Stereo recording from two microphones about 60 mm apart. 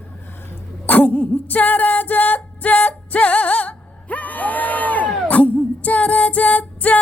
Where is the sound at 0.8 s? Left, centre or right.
Left.